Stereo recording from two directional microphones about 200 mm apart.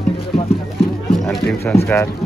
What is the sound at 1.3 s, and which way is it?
Speech, centre (ahead or behind).